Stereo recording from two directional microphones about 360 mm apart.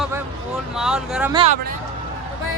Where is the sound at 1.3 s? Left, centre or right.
Centre.